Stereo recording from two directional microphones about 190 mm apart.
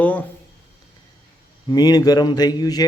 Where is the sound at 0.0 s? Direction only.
10° left (ahead or behind).